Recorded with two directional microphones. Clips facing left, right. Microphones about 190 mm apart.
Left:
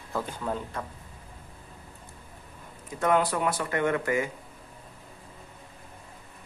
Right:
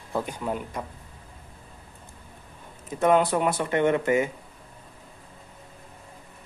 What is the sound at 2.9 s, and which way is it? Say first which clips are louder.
Speech: right 4 dB; 20° right (ahead or behind).